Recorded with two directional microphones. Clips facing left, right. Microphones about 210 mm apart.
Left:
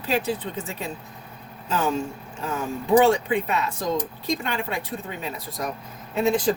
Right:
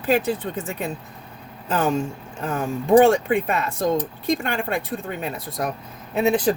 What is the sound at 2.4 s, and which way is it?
Speech, 55° right (ahead or behind).